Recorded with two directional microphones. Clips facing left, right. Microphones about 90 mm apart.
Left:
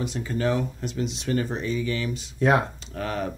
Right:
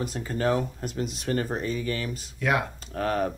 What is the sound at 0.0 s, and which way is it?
Speech, 45° right (ahead or behind).